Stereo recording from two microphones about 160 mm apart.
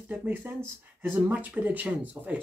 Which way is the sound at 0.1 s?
10° right (ahead or behind).